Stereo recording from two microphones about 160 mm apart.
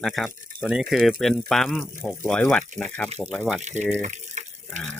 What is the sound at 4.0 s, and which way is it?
Water, 50° right (ahead or behind).